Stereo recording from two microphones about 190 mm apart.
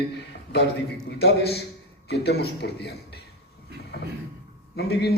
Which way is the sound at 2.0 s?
60° left (ahead or behind).